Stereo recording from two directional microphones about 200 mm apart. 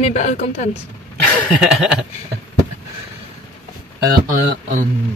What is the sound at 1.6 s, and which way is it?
Chuckle, 5° right (ahead or behind).